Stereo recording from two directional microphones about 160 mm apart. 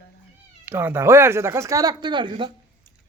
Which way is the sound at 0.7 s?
15° right (ahead or behind).